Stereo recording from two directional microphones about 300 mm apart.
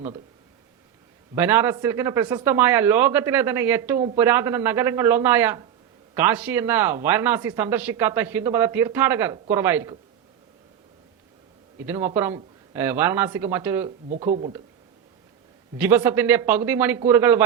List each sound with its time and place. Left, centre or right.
1.4 s speech: centre
11.9 s speech: centre
14.1 s speech: right
15.8 s speech: centre